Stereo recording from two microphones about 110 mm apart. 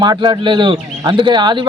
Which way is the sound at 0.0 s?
45° right (ahead or behind).